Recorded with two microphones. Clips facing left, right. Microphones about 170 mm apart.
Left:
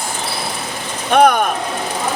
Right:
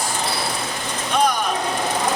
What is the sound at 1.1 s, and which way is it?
Speech, 60° left (ahead or behind).